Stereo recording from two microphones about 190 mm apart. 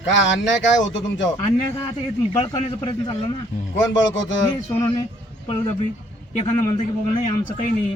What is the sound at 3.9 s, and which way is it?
Speech, 80° left.